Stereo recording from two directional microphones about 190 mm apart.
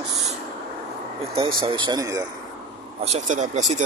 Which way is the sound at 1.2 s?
30° right (ahead or behind).